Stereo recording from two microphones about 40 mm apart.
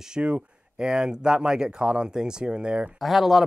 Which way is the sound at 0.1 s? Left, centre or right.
Right.